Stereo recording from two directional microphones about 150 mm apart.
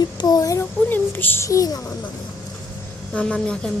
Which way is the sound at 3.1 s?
5° left (ahead or behind).